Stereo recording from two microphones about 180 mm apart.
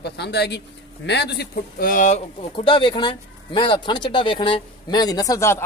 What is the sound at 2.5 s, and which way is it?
Speech, 30° left (ahead or behind).